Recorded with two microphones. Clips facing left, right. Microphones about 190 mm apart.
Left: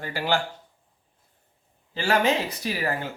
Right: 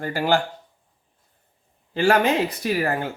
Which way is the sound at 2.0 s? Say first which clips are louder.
Right 4 dB; 55° right (ahead or behind).